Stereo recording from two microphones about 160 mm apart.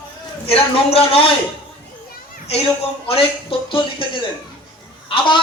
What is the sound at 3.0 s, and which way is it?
Speech, 35° left (ahead or behind).